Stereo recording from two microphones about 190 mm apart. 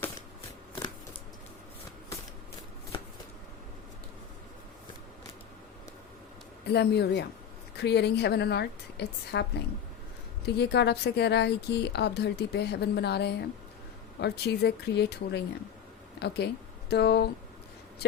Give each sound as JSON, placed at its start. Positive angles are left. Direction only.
{"t": 6.7, "sound": "speech", "side_deg": 60}